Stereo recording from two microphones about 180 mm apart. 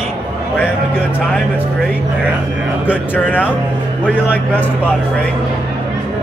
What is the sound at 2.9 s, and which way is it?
Speech, 10° left (ahead or behind).